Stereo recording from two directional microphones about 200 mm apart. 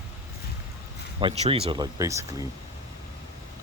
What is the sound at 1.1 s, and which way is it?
Speech, 25° right (ahead or behind).